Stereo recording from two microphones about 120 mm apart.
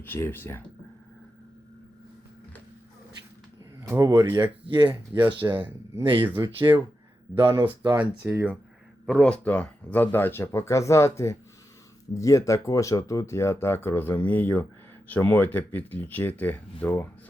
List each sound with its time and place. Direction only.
0.0 s speech: 15° left (ahead or behind)
3.8 s speech: 25° right (ahead or behind); by 7.6 s 40° right (ahead or behind)
7.9 s speech: 10° right (ahead or behind)
9.0 s speech: 5° left (ahead or behind)